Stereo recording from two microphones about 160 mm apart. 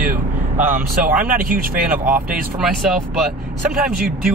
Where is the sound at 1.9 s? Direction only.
10° right (ahead or behind).